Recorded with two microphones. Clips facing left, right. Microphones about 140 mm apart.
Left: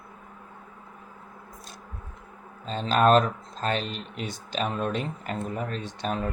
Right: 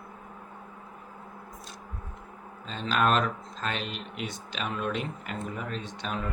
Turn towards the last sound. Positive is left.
turn(degrees=40)  # may be behind; listen again after turning